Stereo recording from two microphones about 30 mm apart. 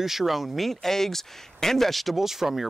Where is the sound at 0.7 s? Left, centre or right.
Centre.